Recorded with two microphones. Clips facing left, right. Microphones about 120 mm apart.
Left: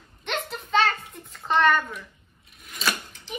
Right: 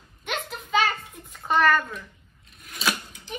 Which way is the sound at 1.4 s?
5° right (ahead or behind).